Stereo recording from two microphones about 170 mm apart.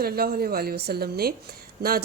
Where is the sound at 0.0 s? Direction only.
65° right (ahead or behind).